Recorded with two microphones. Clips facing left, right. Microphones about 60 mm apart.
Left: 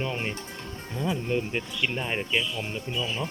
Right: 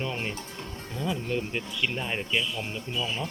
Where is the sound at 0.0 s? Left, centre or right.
Centre.